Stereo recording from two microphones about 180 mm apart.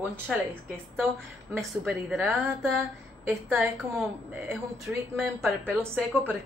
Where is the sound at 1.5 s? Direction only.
Centre (ahead or behind).